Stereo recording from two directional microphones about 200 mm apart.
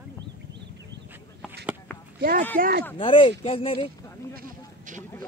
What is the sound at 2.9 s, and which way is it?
Speech, 25° left (ahead or behind).